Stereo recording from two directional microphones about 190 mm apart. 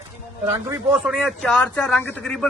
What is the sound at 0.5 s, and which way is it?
Speech, 15° right (ahead or behind).